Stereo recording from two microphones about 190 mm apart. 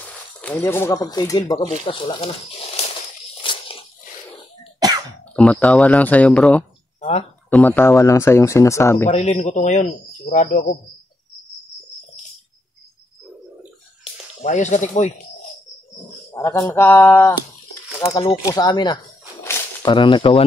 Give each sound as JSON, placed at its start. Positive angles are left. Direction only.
{"t": 0.0, "sound": "speech", "side_deg": 10}
{"t": 3.4, "sound": "a sound", "side_deg": 30}
{"t": 4.7, "sound": "cough", "side_deg": -20}
{"t": 5.3, "sound": "speech", "side_deg": 5}
{"t": 7.0, "sound": "speech", "side_deg": 35}
{"t": 7.4, "sound": "speech", "side_deg": 10}
{"t": 9.1, "sound": "speech", "side_deg": 35}
{"t": 14.4, "sound": "speech", "side_deg": 40}
{"t": 16.3, "sound": "speech", "side_deg": 15}
{"t": 18.4, "sound": "speech", "side_deg": 20}
{"t": 19.4, "sound": "a sound", "side_deg": 15}
{"t": 19.9, "sound": "speech", "side_deg": 25}